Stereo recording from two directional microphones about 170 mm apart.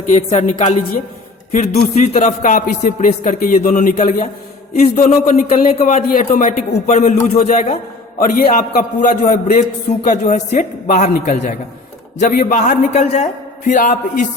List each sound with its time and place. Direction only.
0.1 s speech: 40° left (ahead or behind)
1.5 s a man's voice: 65° left (ahead or behind)
1.9 s a man's voice: 45° left (ahead or behind)